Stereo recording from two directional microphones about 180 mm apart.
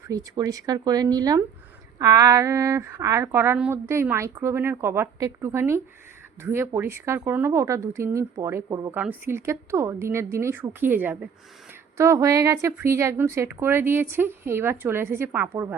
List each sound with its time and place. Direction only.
0.1 s a woman's voice: 20° right (ahead or behind)